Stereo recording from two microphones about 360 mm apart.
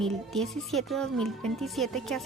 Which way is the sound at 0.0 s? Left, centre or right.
Centre.